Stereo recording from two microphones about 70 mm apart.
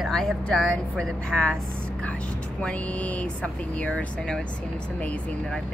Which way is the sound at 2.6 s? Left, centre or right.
Centre.